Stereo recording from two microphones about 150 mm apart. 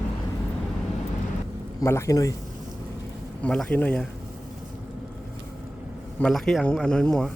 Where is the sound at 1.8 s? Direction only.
20° left (ahead or behind).